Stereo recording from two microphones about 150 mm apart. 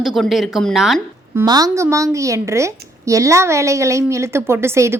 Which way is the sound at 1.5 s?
25° right (ahead or behind).